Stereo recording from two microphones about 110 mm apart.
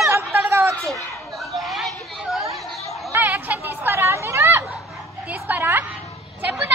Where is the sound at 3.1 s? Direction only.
15° right (ahead or behind).